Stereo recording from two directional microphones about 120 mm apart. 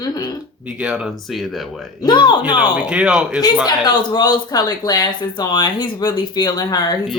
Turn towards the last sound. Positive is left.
turn(degrees=35)  # may be behind; listen again after turning